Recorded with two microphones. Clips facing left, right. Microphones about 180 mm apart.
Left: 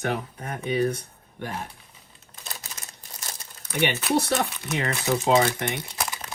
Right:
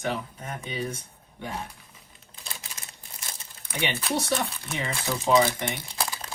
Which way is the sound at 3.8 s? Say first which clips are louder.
Left 5 dB; 60° left (ahead or behind).